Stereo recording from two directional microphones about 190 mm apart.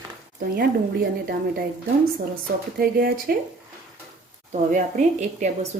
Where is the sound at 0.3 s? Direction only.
50° right (ahead or behind).